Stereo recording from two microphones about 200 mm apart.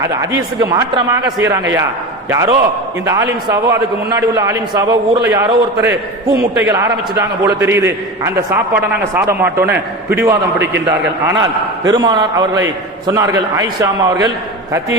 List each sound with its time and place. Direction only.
0.0 s a man's voice: 15° right (ahead or behind)
2.3 s a man's voice: 15° right (ahead or behind)